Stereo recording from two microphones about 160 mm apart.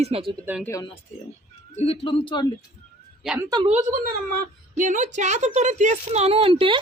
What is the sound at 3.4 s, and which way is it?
Speech, 25° right (ahead or behind).